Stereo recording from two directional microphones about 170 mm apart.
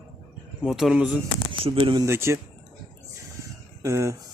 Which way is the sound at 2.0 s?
15° right (ahead or behind).